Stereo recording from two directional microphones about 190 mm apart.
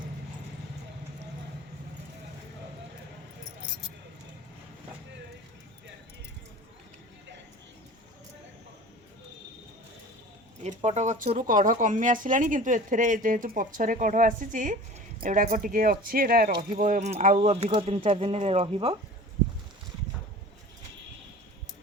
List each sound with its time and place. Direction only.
10.6 s speech: 35° right (ahead or behind)